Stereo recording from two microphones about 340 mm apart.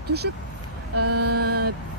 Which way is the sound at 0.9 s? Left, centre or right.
Right.